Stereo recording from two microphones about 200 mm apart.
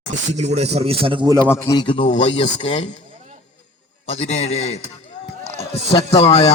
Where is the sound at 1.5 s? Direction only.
15° left (ahead or behind); by 3.0 s 35° left (ahead or behind).